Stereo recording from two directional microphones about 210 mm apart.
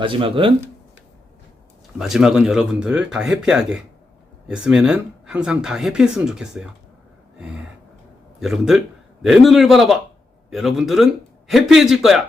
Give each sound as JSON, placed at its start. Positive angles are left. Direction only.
{"t": 0.0, "sound": "speech", "side_deg": -25}
{"t": 2.0, "sound": "speech", "side_deg": 0}
{"t": 7.3, "sound": "gasp", "side_deg": -5}
{"t": 8.4, "sound": "speech", "side_deg": 0}